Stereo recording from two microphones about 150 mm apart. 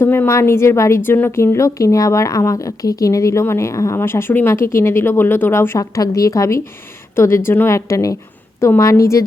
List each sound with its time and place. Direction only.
0.0 s a woman's voice: 15° left (ahead or behind)